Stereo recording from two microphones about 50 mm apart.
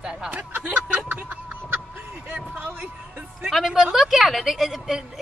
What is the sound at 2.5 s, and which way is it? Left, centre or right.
Speech, right.